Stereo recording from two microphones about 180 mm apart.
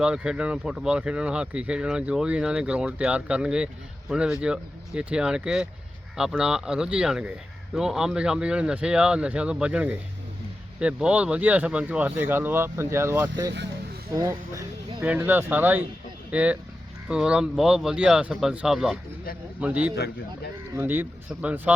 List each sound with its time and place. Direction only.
0.0 s speech: 5° right (ahead or behind)